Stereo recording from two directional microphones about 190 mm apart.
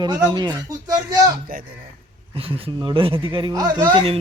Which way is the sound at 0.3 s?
20° right (ahead or behind).